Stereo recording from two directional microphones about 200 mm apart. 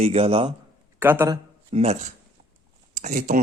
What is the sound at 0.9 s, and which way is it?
Speech, 10° right (ahead or behind).